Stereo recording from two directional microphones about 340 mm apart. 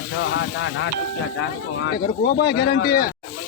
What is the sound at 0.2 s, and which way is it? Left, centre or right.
Speech, left.